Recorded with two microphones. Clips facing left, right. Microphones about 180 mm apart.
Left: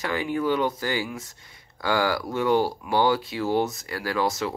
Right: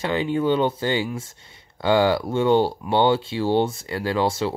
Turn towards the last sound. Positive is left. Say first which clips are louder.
# right 3 dB
turn(degrees=-30)  # may be behind; listen again after turning